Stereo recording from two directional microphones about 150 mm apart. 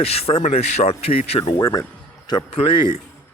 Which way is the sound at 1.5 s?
25° left (ahead or behind).